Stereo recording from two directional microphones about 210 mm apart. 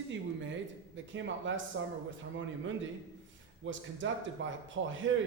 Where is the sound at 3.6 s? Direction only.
65° right (ahead or behind).